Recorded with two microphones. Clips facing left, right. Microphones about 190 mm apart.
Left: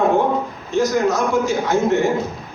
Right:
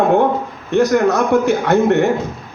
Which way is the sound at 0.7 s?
60° right (ahead or behind).